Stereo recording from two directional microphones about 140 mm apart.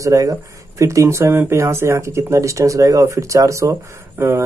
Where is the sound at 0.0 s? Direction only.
25° right (ahead or behind).